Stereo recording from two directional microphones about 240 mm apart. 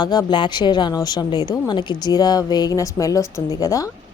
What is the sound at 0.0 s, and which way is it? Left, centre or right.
A woman's voice, centre.